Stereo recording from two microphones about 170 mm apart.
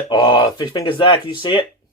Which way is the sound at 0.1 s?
30° left (ahead or behind).